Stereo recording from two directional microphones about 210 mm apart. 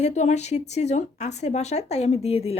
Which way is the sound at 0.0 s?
35° left (ahead or behind).